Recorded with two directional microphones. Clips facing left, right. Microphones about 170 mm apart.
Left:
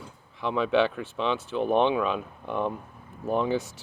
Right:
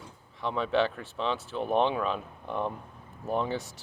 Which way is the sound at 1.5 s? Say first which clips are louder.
Left 4 dB; centre (ahead or behind).